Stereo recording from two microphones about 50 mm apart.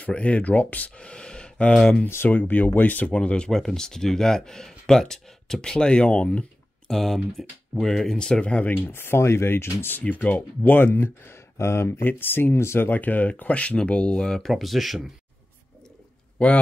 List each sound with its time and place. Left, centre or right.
0.1 s speech: left
2.2 s speech: left
3.1 s speech: left
6.9 s speech: centre; by 8.6 s left
8.8 s speech: left
10.0 s speech: left
11.3 s speech: left
12.0 s speech: left
12.8 s speech: left; by 14.5 s centre
14.5 s speech: centre
16.4 s speech: left